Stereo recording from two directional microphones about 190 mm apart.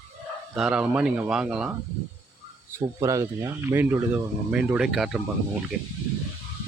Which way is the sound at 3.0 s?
15° right (ahead or behind).